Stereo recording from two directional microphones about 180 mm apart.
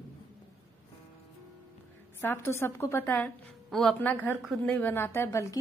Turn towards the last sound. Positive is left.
turn(degrees=15)  # may be behind; listen again after turning